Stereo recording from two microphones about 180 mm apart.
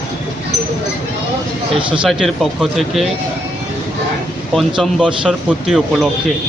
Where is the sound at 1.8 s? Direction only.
30° right (ahead or behind).